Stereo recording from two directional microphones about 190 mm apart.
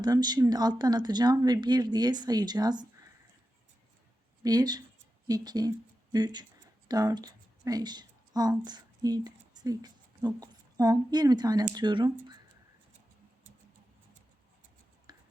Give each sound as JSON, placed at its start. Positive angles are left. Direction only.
{"t": 0.0, "sound": "speech", "side_deg": -20}
{"t": 4.4, "sound": "speech", "side_deg": -20}
{"t": 15.1, "sound": "writing", "side_deg": -20}